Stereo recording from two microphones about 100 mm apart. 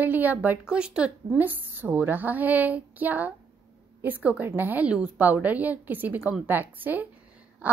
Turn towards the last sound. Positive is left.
turn(degrees=-20)  # may be behind; listen again after turning